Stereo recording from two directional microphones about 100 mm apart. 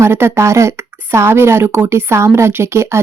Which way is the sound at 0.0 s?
25° right (ahead or behind).